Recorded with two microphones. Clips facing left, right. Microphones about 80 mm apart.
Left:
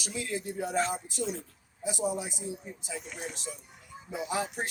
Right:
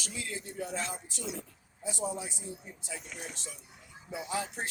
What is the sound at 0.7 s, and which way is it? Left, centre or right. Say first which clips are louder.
Speech: left 9 dB; left.